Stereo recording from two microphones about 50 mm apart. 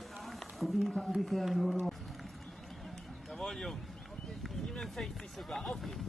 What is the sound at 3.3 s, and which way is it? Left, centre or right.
Speech, centre.